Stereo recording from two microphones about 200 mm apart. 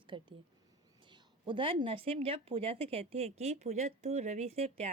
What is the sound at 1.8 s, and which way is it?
Speech, 25° right (ahead or behind).